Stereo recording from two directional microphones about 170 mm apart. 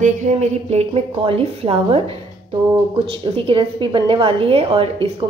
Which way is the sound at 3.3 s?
30° right (ahead or behind).